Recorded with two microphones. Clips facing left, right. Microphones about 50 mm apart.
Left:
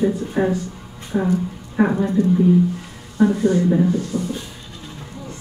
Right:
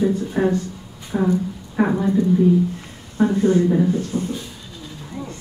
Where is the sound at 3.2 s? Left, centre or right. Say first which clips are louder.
Even; right.